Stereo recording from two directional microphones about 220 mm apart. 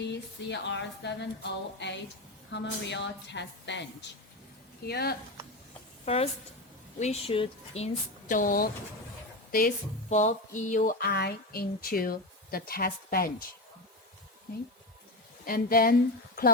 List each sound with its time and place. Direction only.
0.0 s a woman's voice: 50° left (ahead or behind)
4.9 s a woman's voice: 45° left (ahead or behind)
6.1 s speech: 25° left (ahead or behind); by 13.3 s 40° left (ahead or behind)
15.4 s speech: 40° left (ahead or behind)